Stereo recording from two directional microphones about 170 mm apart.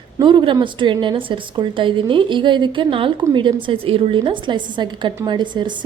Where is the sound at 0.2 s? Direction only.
30° right (ahead or behind).